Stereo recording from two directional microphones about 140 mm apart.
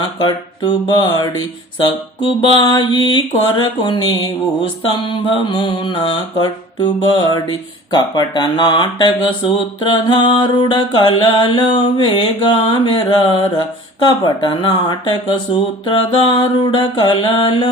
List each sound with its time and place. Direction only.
0.2 s music: 35° left (ahead or behind)
2.4 s music: 35° left (ahead or behind)